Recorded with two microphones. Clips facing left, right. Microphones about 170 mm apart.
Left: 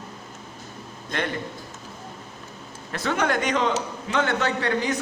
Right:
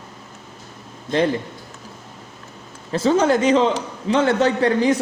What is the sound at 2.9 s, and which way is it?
Speech, 30° right (ahead or behind).